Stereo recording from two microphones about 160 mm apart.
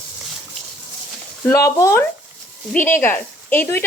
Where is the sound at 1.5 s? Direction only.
20° left (ahead or behind).